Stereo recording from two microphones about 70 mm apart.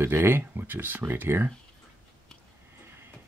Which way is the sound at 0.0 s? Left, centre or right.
Right.